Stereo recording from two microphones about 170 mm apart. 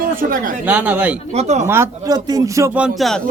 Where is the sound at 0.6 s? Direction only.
10° right (ahead or behind).